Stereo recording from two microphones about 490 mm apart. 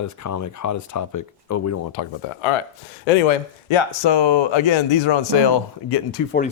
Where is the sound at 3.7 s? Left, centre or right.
Left.